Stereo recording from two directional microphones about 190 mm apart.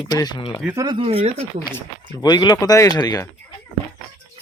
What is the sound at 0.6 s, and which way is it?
Speech, 10° right (ahead or behind).